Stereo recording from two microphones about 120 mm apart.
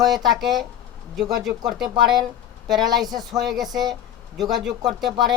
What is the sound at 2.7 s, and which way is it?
Speech, 35° right (ahead or behind).